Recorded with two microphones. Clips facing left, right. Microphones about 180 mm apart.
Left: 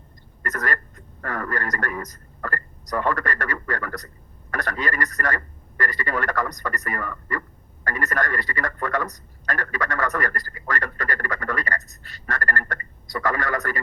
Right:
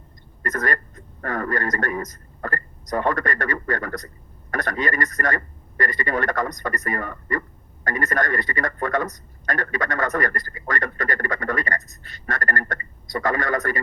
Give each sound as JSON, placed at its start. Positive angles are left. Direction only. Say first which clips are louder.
{"t": 0.4, "sound": "a man's voice", "louder": "right 3 dB", "side_deg": -20}